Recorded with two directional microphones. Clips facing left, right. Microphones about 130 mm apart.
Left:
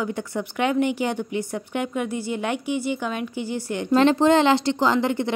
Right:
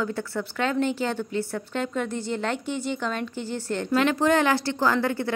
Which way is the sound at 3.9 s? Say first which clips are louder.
Left 5 dB; 30° left (ahead or behind).